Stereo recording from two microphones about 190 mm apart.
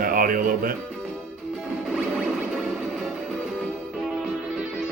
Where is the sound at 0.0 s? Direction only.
50° right (ahead or behind).